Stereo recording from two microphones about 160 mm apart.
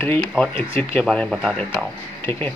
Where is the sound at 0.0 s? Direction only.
10° left (ahead or behind).